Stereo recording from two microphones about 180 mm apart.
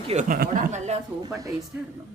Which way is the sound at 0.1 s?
40° right (ahead or behind).